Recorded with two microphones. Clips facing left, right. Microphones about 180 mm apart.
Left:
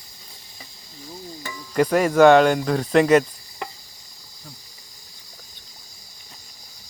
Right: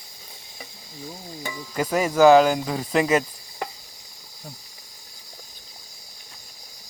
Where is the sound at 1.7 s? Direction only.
5° right (ahead or behind).